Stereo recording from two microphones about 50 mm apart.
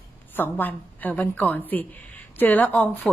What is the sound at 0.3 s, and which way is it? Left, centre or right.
Speech, left.